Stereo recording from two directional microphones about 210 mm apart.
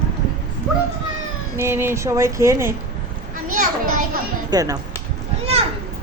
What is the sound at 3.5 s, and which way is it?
Children playing, 40° right (ahead or behind).